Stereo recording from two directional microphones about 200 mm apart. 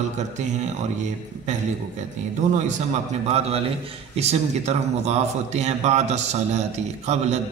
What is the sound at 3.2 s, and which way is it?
A man's voice, 30° right (ahead or behind).